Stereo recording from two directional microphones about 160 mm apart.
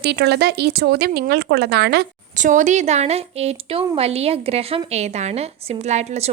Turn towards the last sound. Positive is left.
turn(degrees=-45)  # may be behind; listen again after turning